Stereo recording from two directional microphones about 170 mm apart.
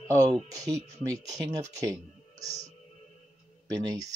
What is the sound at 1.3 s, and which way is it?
Speech, 20° right (ahead or behind).